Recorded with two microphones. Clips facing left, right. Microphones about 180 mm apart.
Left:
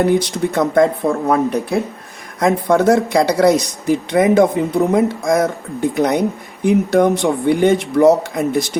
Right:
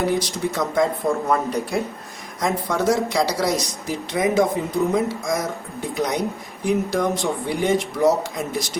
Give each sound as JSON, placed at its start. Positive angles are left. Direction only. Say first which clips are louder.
{"t": 0.0, "sound": "speech", "louder": "left 6 dB", "side_deg": 60}